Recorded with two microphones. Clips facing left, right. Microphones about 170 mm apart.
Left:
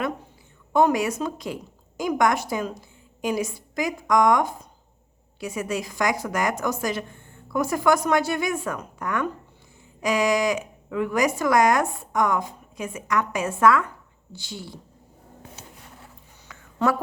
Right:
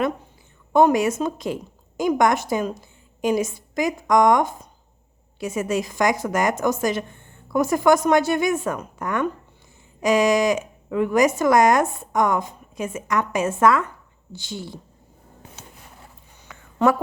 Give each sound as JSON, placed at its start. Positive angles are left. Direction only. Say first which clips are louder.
{"t": 0.7, "sound": "a woman's voice", "louder": "right 3 dB", "side_deg": -25}